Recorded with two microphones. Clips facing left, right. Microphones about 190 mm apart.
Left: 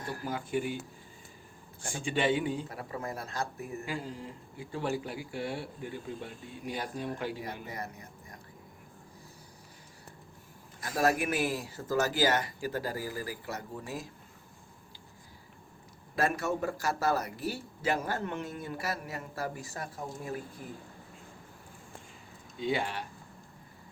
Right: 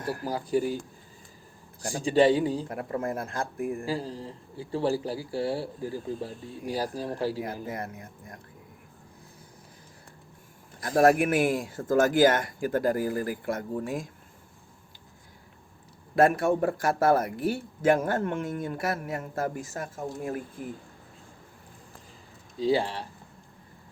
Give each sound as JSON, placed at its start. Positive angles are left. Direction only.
{"t": 0.3, "sound": "speech", "side_deg": -35}
{"t": 1.8, "sound": "speech", "side_deg": -35}
{"t": 2.6, "sound": "a man's voice", "side_deg": -50}
{"t": 3.8, "sound": "speech", "side_deg": -35}
{"t": 7.7, "sound": "a man's voice", "side_deg": -50}
{"t": 10.8, "sound": "a man's voice", "side_deg": -55}
{"t": 16.1, "sound": "a man's voice", "side_deg": -50}
{"t": 22.5, "sound": "speech", "side_deg": -35}